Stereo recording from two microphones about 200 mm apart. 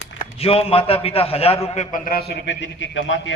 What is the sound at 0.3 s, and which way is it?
A man's voice, 30° left (ahead or behind).